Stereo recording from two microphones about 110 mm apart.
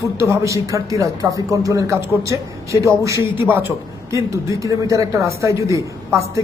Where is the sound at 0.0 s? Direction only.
25° right (ahead or behind).